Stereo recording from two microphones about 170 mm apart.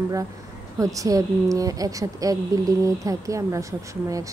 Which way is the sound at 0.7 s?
20° right (ahead or behind).